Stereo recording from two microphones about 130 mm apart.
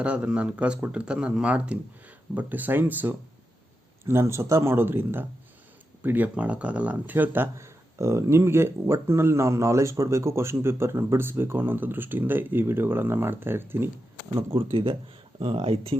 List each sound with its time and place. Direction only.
0.0 s speech: 10° right (ahead or behind)
14.5 s speech: 45° right (ahead or behind)